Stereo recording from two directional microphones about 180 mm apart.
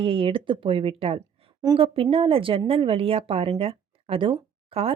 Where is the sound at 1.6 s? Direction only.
20° right (ahead or behind).